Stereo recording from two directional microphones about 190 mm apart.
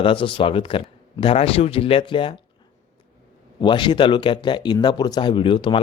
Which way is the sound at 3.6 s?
25° left (ahead or behind).